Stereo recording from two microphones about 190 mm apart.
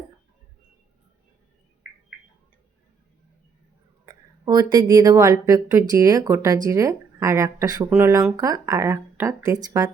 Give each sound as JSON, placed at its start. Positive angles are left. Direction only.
{"t": 4.0, "sound": "speech", "side_deg": -20}